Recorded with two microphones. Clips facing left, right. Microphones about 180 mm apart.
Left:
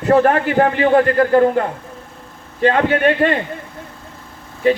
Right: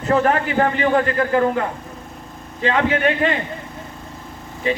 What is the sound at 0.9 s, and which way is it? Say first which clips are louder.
Speech: left 5 dB; 55° left (ahead or behind).